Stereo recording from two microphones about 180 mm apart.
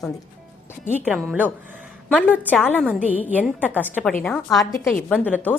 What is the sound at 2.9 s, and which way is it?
Speech, 10° right (ahead or behind).